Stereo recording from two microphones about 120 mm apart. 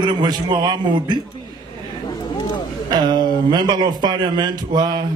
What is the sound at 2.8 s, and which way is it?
A man's voice, 40° right (ahead or behind).